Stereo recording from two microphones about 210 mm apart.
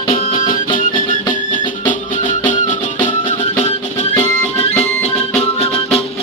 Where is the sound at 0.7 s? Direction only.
40° left (ahead or behind).